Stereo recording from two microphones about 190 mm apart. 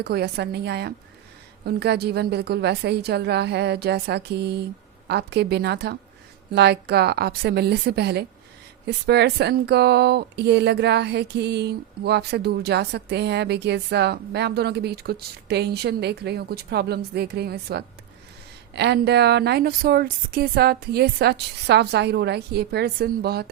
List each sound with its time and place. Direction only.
0.0 s speech: 55° right (ahead or behind)